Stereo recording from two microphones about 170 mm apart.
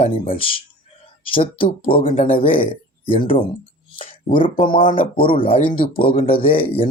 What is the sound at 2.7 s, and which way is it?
Speech, 30° left (ahead or behind).